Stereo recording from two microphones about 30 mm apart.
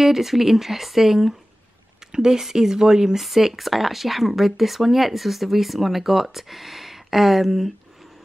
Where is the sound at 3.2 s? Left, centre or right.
Centre.